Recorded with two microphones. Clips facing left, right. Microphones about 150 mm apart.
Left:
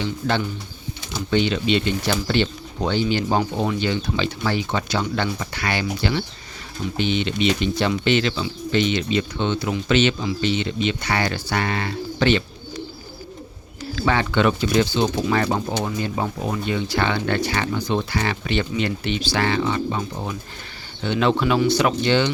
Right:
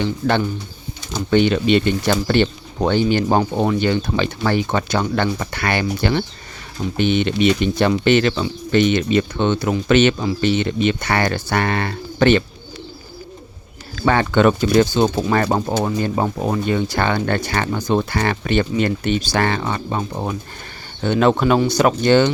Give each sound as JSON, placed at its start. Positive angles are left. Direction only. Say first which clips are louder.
{"t": 0.0, "sound": "speech", "louder": "right 4 dB", "side_deg": -55}
{"t": 13.9, "sound": "speech", "louder": "right 4 dB", "side_deg": -50}